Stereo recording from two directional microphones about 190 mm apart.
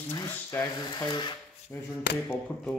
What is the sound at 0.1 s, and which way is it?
Speech, 15° left (ahead or behind).